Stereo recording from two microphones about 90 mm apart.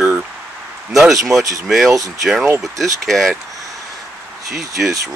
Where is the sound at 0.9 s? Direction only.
Centre (ahead or behind).